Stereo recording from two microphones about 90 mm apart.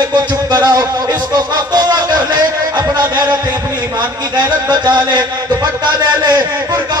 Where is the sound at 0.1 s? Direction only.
50° right (ahead or behind).